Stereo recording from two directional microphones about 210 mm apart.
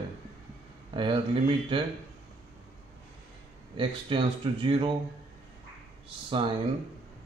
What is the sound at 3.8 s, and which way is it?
Speech, 25° right (ahead or behind).